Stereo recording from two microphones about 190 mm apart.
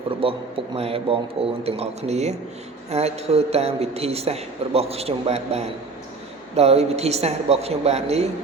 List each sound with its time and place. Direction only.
0.2 s a man's voice: 30° right (ahead or behind)